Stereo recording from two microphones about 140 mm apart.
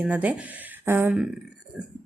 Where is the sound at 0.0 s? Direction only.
10° right (ahead or behind).